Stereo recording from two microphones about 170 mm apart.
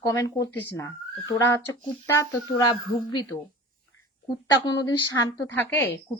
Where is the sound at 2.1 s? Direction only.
25° left (ahead or behind).